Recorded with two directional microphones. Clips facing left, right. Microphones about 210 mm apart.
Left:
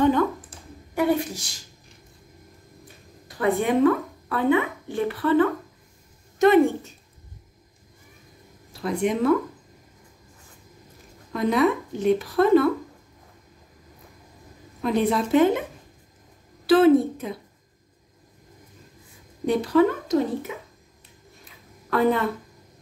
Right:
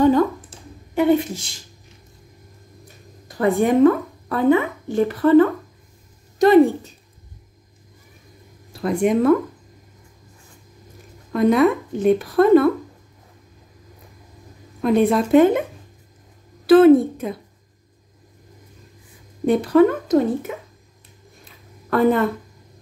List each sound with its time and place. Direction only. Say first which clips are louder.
0.9 s a woman's voice: right 5 dB; 25° right (ahead or behind)
3.3 s a woman's voice: right 4 dB; 45° right (ahead or behind)
8.8 s a woman's voice: right 5 dB; 50° right (ahead or behind)
11.3 s a woman's voice: right 5 dB; 50° right (ahead or behind)
14.8 s a woman's voice: right 5 dB; 50° right (ahead or behind)
16.6 s a woman's voice: right 5 dB; 55° right (ahead or behind)
19.4 s a woman's voice: right 5 dB; 50° right (ahead or behind)